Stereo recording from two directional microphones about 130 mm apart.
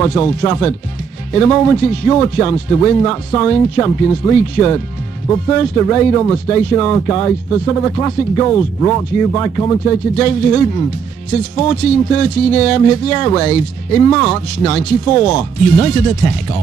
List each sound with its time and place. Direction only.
0.0 s speech: 10° left (ahead or behind)
11.6 s speech: 5° left (ahead or behind)